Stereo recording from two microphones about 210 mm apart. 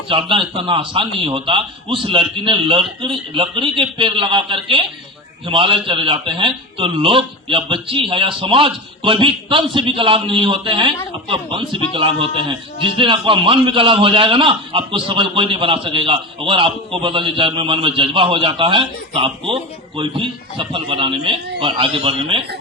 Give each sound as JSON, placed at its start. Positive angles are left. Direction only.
{"t": 0.1, "sound": "a man's voice", "side_deg": -25}